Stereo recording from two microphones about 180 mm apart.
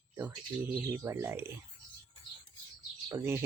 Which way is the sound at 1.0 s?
15° right (ahead or behind).